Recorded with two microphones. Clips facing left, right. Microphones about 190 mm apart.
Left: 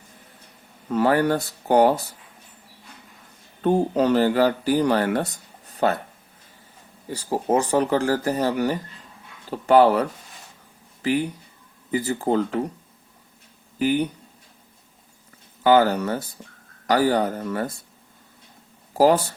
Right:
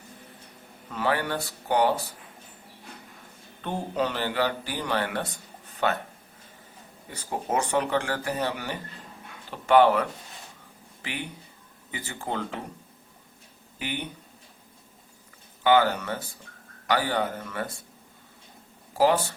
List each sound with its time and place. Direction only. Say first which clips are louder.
0.9 s speech: left 8 dB; 40° left (ahead or behind)
3.6 s speech: left 9 dB; 40° left (ahead or behind)
7.1 s speech: left 7 dB; 35° left (ahead or behind)
13.7 s speech: left 13 dB; 40° left (ahead or behind)
15.6 s speech: left 4 dB; 40° left (ahead or behind)
18.9 s speech: left 5 dB; 40° left (ahead or behind)